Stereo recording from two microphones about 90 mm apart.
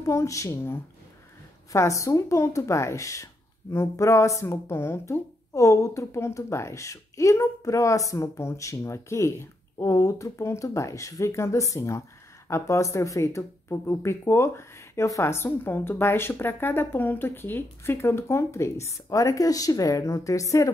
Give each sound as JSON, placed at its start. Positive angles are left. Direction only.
{"t": 0.0, "sound": "speech", "side_deg": 35}